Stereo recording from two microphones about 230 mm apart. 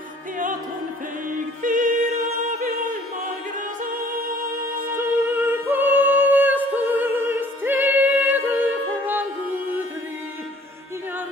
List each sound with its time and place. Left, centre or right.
1.6 s music: right
2.6 s a sound: right
4.9 s music: centre